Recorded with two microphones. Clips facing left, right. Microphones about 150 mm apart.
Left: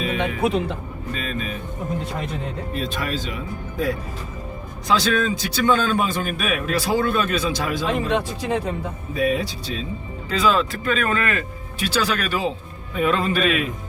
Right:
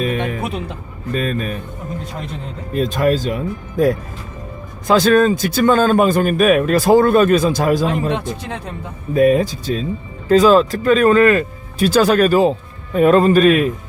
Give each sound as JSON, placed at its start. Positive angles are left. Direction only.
{"t": 0.0, "sound": "music", "side_deg": -45}
{"t": 1.1, "sound": "speech", "side_deg": -45}
{"t": 2.7, "sound": "speech", "side_deg": -45}
{"t": 8.4, "sound": "speech", "side_deg": 5}
{"t": 9.1, "sound": "speech", "side_deg": -45}